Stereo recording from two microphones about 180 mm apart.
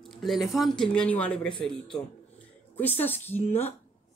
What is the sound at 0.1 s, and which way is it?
Speech, centre (ahead or behind).